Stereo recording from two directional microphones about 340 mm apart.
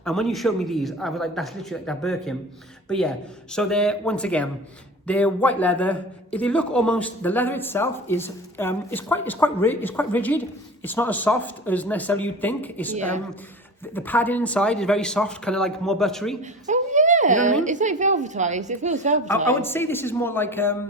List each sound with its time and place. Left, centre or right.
0.0 s a man's voice: centre
16.6 s a woman's voice: right
19.5 s a man's voice: centre